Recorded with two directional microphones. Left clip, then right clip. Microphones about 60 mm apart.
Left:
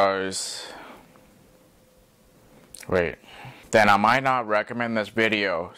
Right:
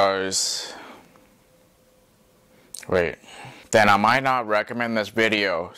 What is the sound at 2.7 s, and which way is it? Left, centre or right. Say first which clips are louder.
Speech: right 2 dB; right.